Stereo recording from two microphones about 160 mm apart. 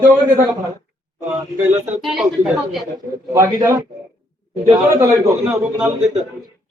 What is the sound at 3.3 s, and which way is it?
A man's voice, 20° right (ahead or behind).